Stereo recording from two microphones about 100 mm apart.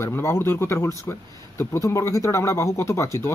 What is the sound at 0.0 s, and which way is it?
Speech, 25° left (ahead or behind).